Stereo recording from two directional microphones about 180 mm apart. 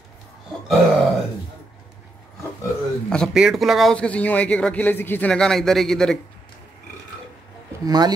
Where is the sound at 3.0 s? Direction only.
Centre (ahead or behind).